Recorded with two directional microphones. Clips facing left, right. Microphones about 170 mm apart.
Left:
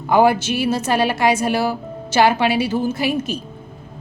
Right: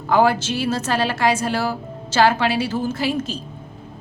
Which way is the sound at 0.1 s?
15° left (ahead or behind).